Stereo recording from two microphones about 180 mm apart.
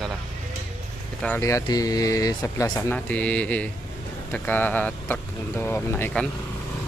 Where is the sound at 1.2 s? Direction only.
15° left (ahead or behind).